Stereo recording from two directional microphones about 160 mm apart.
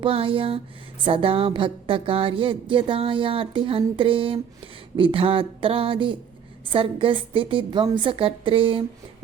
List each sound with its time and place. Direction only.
0.0 s a woman's voice: 35° right (ahead or behind)